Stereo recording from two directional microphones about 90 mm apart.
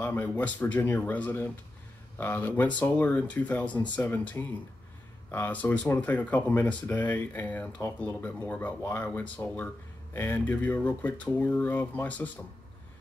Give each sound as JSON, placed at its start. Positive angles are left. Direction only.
{"t": 0.0, "sound": "speech", "side_deg": 20}